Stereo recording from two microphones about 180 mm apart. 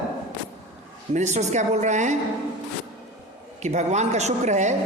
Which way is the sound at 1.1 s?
40° right (ahead or behind).